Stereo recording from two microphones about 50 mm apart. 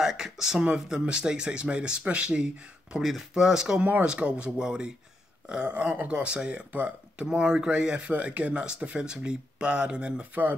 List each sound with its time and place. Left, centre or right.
0.0 s speech: centre
3.0 s speech: centre; by 7.2 s right
7.2 s speech: centre